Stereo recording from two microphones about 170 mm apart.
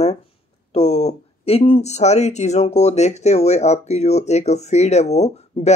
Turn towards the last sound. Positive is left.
turn(degrees=40)  # may be behind; listen again after turning